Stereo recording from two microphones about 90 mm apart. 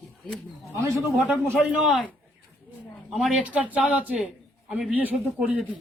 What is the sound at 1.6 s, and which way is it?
Speech, 5° right (ahead or behind).